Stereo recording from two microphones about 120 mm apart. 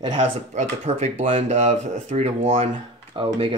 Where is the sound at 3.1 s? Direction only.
45° right (ahead or behind).